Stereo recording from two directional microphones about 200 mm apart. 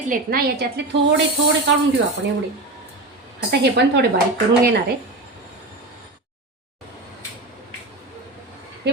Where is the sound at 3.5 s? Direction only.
55° right (ahead or behind).